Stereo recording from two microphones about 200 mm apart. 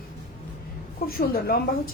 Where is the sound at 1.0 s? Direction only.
50° left (ahead or behind).